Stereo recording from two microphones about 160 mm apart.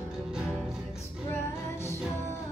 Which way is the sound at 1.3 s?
15° left (ahead or behind).